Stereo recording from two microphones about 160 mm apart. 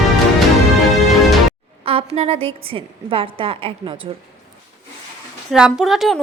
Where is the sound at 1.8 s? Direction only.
35° right (ahead or behind).